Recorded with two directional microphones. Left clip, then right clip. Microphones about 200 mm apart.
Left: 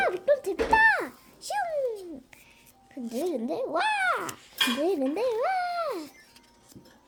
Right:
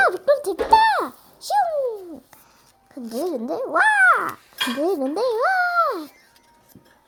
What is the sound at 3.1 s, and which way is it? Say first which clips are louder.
A child's voice: right 5 dB; 25° right (ahead or behind).